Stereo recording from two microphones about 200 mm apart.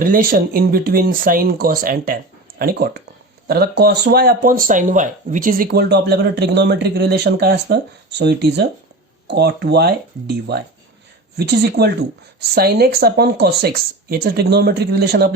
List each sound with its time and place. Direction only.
0.0 s speech: 45° right (ahead or behind)